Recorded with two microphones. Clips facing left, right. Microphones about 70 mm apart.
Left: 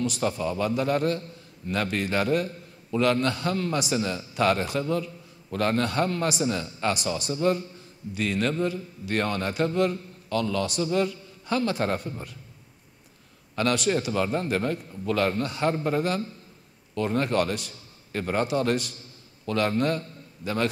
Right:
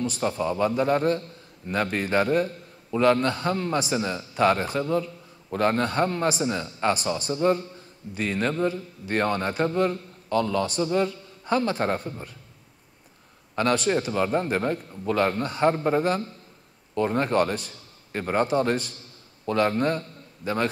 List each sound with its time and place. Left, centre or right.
0.3 s a man's voice: centre
3.5 s a man's voice: centre
7.2 s a man's voice: right
13.6 s a man's voice: right